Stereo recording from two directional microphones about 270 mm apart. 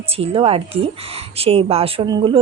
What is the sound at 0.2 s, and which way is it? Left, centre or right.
Speech, right.